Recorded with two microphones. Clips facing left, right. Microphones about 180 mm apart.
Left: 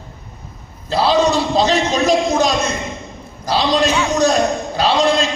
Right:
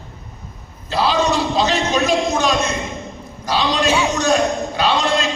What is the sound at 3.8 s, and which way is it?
Speech, 10° right (ahead or behind).